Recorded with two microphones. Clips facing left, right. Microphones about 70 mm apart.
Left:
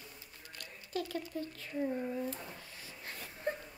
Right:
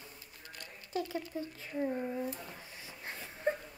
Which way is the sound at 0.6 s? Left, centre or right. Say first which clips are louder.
Right 2 dB; right.